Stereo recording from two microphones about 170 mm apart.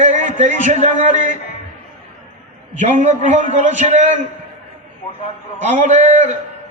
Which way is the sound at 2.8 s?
45° right (ahead or behind).